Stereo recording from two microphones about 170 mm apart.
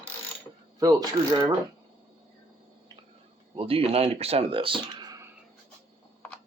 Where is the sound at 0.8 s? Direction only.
20° right (ahead or behind).